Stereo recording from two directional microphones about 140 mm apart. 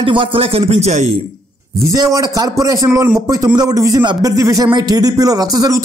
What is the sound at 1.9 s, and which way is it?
Speech, 25° right (ahead or behind).